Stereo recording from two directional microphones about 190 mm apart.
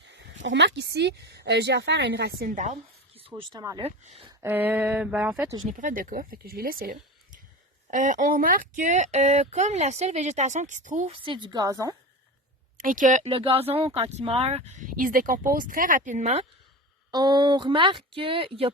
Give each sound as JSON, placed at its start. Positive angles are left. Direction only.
{"t": 0.0, "sound": "speech", "side_deg": -70}
{"t": 3.2, "sound": "speech", "side_deg": -30}
{"t": 3.8, "sound": "speech", "side_deg": -30}
{"t": 4.4, "sound": "a sound", "side_deg": -10}
{"t": 5.4, "sound": "a sound", "side_deg": -15}
{"t": 5.6, "sound": "speech", "side_deg": -45}
{"t": 11.2, "sound": "speech", "side_deg": -25}
{"t": 12.7, "sound": "speech", "side_deg": -45}
{"t": 17.1, "sound": "speech", "side_deg": -20}